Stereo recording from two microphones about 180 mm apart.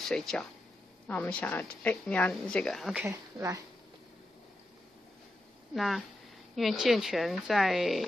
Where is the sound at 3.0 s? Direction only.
15° right (ahead or behind).